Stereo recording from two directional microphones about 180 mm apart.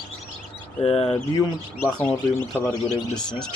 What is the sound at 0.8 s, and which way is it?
Speech, 35° left (ahead or behind).